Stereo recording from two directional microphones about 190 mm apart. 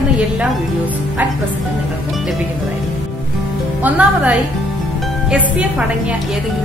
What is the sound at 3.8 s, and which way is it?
Speech, 5° right (ahead or behind).